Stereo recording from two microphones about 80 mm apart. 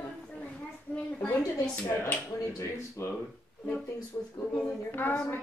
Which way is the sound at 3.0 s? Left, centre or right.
Left.